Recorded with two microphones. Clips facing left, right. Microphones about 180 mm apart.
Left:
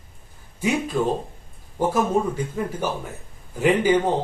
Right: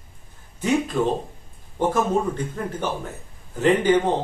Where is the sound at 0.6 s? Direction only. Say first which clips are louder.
Right 1 dB; 10° left (ahead or behind).